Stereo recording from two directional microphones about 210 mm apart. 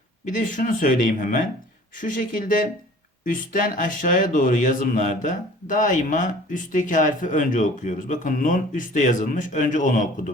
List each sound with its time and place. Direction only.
0.3 s speech: 40° left (ahead or behind)